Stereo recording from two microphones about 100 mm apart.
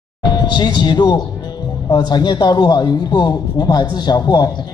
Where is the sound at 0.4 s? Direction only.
45° left (ahead or behind).